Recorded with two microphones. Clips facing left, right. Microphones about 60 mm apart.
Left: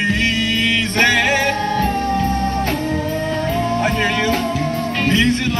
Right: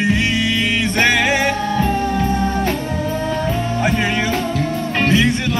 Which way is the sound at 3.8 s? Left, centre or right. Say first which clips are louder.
Even; centre.